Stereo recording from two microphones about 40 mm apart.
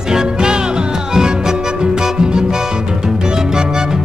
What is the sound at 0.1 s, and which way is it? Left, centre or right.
Music, centre.